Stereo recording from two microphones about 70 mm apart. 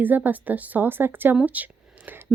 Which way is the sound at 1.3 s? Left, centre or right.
Centre.